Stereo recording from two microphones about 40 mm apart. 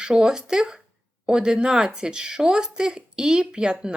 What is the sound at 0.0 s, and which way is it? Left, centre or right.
Speech, right.